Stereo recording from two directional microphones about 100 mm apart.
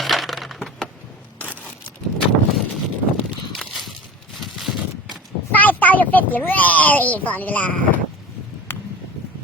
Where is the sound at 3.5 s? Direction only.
Centre (ahead or behind).